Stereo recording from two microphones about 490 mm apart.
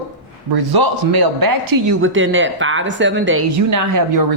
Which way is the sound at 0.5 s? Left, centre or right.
Right.